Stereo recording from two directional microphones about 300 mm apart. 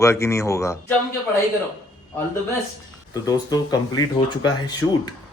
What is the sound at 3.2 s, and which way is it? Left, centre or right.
Speech, centre.